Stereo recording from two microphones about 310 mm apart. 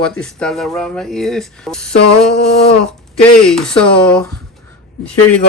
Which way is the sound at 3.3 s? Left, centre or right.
Centre.